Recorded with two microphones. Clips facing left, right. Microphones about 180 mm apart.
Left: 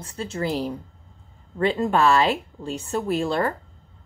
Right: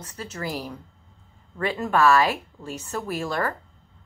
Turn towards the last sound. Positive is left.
turn(degrees=25)  # may be behind; listen again after turning